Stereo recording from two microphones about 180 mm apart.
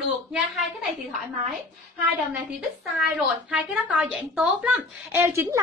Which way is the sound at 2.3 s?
10° right (ahead or behind).